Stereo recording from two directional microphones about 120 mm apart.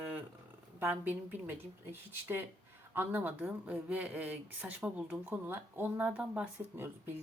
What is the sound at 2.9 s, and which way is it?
Speech, 15° right (ahead or behind).